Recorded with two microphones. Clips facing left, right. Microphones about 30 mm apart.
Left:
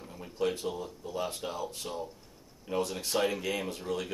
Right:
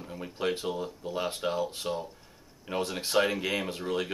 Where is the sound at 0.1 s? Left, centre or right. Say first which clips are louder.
Right 1 dB; right.